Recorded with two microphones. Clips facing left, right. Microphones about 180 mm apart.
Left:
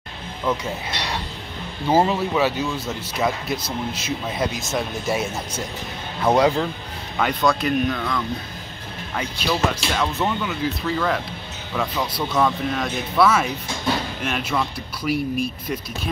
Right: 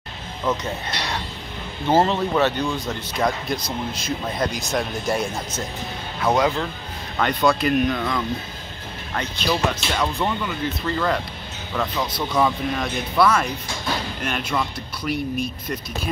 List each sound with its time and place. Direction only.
1.9 s speech: 10° left (ahead or behind)
6.3 s speech: 35° left (ahead or behind)
7.2 s speech: centre (ahead or behind)